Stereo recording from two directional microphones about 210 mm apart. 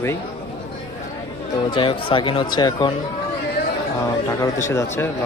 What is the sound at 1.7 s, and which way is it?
Speech, 25° left (ahead or behind).